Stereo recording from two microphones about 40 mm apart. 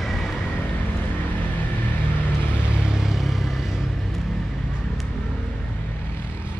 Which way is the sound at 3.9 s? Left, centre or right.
Centre.